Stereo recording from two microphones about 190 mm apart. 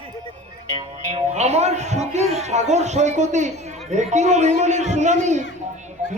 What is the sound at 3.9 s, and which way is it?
A man's voice, 40° right (ahead or behind).